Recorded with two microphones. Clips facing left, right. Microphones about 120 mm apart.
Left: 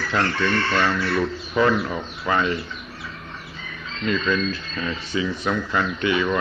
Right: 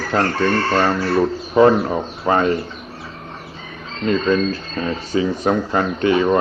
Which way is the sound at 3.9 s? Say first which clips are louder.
Right 6 dB; 40° right (ahead or behind).